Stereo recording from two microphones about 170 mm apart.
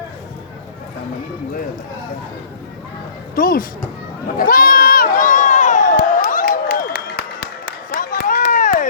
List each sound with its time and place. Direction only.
3.3 s speech: 55° left (ahead or behind)
4.4 s crowd: 55° left (ahead or behind)